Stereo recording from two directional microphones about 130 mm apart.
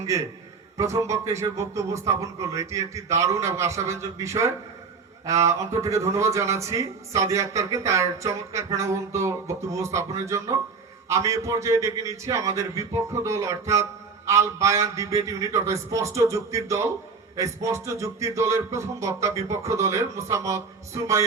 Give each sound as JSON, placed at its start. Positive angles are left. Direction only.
{"t": 0.8, "sound": "a man's voice", "side_deg": -25}